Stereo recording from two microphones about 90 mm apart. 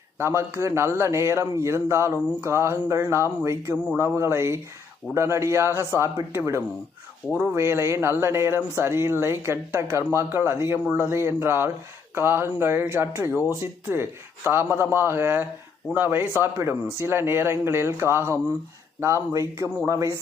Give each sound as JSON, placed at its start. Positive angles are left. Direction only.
{"t": 0.2, "sound": "a man's voice", "side_deg": -30}